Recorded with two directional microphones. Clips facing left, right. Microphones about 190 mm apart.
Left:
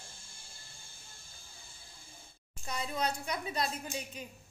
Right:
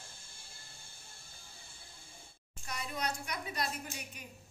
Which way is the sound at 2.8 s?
25° left (ahead or behind).